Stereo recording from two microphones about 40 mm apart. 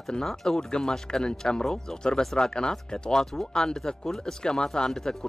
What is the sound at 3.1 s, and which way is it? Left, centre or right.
Speech, centre.